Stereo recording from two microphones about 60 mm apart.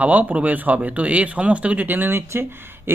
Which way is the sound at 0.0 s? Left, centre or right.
Right.